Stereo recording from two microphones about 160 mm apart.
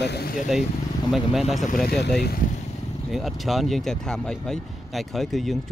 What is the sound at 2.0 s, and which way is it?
Speech, 90° left.